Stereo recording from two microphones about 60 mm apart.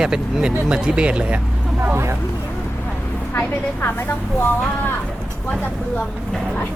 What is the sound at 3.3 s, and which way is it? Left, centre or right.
Speech, left.